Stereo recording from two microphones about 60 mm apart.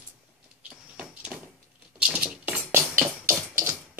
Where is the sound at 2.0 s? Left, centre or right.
Right.